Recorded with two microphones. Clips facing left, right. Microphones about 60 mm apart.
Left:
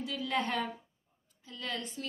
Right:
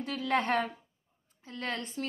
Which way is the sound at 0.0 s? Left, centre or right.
Right.